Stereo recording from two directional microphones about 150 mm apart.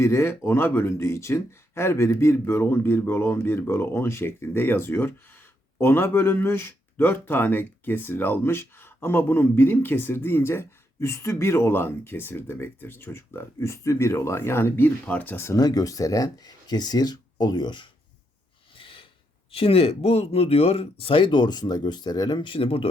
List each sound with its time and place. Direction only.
0.0 s speech: 15° left (ahead or behind)
18.8 s a sound: 35° left (ahead or behind)
19.5 s speech: 40° left (ahead or behind)